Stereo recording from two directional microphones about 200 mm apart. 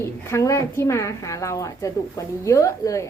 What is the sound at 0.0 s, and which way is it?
Speech, 15° left (ahead or behind).